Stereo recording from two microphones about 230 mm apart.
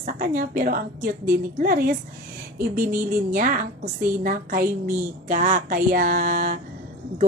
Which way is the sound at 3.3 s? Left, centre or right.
Right.